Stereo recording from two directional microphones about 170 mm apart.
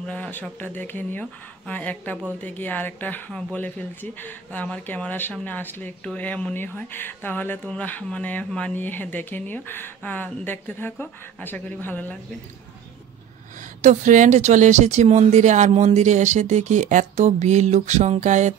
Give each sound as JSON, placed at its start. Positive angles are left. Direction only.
{"t": 0.0, "sound": "speech", "side_deg": 5}
{"t": 13.7, "sound": "speech", "side_deg": -45}